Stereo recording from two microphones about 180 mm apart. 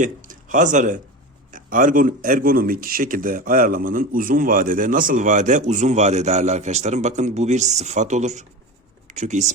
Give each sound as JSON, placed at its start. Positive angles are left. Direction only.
{"t": 0.0, "sound": "speech", "side_deg": -45}